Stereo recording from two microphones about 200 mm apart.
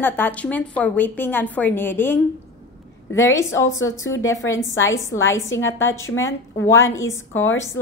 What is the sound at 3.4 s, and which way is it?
Speech, 15° left (ahead or behind).